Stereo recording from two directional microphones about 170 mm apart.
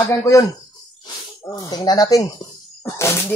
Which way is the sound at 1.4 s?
25° left (ahead or behind).